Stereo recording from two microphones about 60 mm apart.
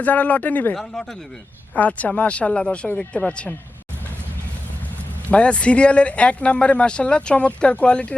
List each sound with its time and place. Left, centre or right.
0.0 s speech: left
0.8 s speech: centre
1.7 s speech: left
5.3 s speech: centre